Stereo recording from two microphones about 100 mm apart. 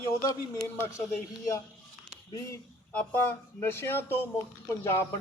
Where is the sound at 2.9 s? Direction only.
15° left (ahead or behind).